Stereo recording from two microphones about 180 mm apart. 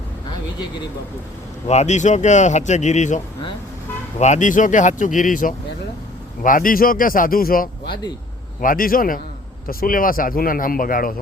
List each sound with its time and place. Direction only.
1.6 s speech: 40° left (ahead or behind)
4.2 s speech: 40° left (ahead or behind)